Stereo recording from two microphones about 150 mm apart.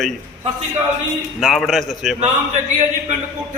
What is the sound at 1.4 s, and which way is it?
Speech, centre (ahead or behind).